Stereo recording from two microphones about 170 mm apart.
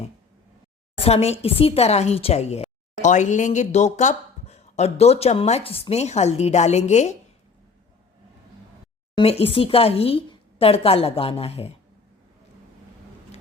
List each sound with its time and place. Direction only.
1.0 s speech: 40° left (ahead or behind)
9.1 s speech: 35° left (ahead or behind)